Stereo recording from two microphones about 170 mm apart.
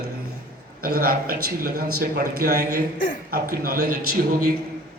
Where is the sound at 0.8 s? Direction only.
60° right (ahead or behind).